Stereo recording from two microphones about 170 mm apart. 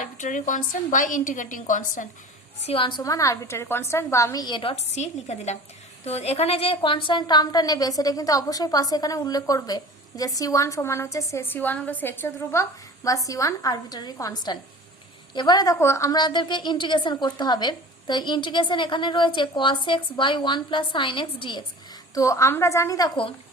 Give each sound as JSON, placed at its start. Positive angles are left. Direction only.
{"t": 0.0, "sound": "a woman's voice", "side_deg": 45}
{"t": 2.6, "sound": "a woman's voice", "side_deg": 35}
{"t": 3.0, "sound": "a woman's voice", "side_deg": 20}
{"t": 22.1, "sound": "a woman's voice", "side_deg": 20}